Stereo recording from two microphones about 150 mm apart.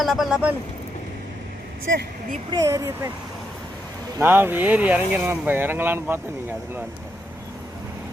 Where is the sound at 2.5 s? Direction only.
20° right (ahead or behind).